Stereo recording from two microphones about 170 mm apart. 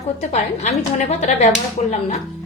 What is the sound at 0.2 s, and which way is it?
Speech, 40° left (ahead or behind).